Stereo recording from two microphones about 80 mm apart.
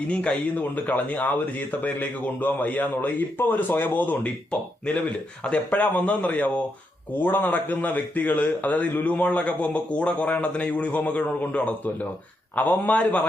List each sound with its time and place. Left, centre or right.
0.1 s a man's voice: centre